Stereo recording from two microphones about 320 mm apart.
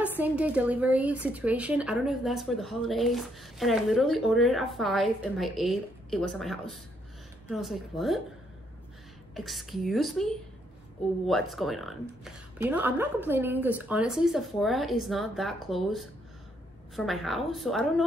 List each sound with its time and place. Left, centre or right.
0.2 s a woman's voice: centre
9.3 s a woman's voice: centre
11.2 s a woman's voice: centre